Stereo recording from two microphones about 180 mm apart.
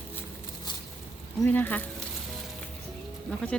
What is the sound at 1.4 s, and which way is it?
Speech, 10° left (ahead or behind).